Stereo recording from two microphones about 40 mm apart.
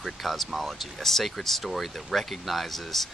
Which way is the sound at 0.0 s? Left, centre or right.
Centre.